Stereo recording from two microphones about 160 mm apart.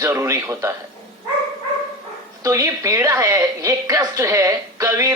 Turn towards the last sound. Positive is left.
turn(degrees=-20)  # may be behind; listen again after turning